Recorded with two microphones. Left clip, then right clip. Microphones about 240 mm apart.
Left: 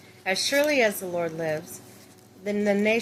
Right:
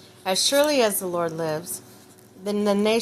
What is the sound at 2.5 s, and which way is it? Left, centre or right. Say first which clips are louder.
Speech: right 2 dB; right.